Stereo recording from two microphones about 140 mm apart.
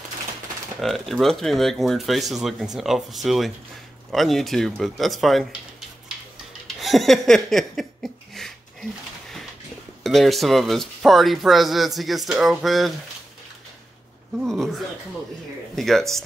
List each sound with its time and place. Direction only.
0.7 s speech: centre (ahead or behind)
6.8 s a sound: centre (ahead or behind)
10.0 s speech: centre (ahead or behind)
14.4 s speech: centre (ahead or behind)